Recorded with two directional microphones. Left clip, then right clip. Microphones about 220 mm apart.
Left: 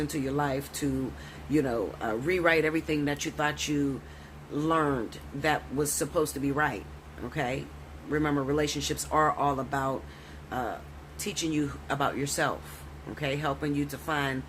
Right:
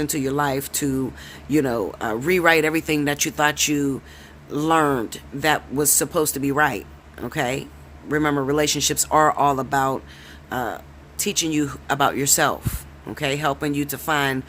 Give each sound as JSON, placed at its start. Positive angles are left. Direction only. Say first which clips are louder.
{"t": 0.0, "sound": "speech", "louder": "right 8 dB", "side_deg": -50}